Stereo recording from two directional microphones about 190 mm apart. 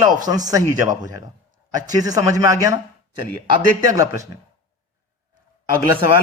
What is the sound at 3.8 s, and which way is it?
Speech, 20° right (ahead or behind).